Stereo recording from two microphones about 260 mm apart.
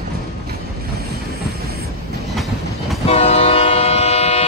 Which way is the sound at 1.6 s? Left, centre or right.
Right.